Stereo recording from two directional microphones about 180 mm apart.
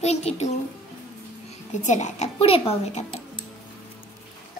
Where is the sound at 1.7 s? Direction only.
40° left (ahead or behind).